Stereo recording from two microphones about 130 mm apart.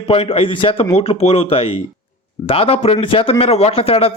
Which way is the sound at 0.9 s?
55° left (ahead or behind).